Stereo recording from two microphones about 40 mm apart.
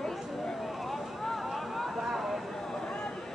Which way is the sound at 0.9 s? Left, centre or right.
Centre.